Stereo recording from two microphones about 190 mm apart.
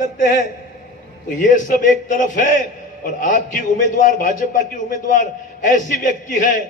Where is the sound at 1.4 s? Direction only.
45° left (ahead or behind).